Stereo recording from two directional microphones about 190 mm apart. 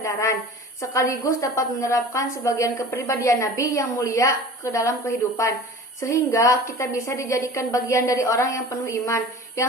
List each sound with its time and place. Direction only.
0.0 s a woman's voice: 15° left (ahead or behind)